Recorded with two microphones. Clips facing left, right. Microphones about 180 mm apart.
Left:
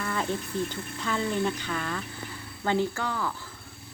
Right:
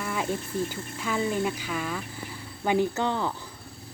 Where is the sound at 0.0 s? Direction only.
10° right (ahead or behind).